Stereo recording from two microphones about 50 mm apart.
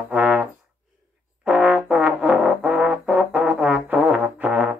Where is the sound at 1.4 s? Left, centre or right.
Right.